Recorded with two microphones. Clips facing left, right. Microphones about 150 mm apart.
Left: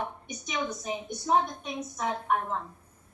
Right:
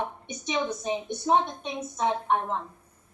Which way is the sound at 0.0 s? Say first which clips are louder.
Right 3 dB; 25° right (ahead or behind).